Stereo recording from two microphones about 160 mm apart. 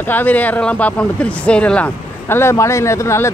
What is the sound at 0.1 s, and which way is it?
Speech, 10° left (ahead or behind).